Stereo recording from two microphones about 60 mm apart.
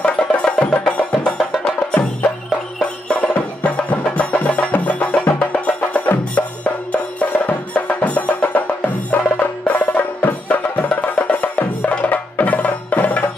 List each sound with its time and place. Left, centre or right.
0.0 s music: centre
3.1 s music: left